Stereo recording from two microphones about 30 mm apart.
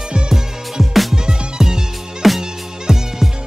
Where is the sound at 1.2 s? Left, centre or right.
Centre.